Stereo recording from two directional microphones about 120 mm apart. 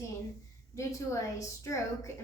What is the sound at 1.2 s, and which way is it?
Speech, 25° left (ahead or behind).